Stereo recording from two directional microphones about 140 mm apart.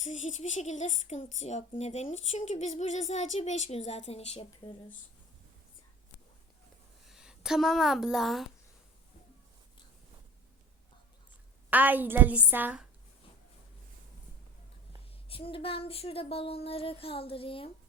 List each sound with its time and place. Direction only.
0.0 s speech: 60° left (ahead or behind)
7.1 s a woman's voice: 5° right (ahead or behind)
11.7 s a woman's voice: 10° right (ahead or behind)
15.3 s a sound: 40° left (ahead or behind)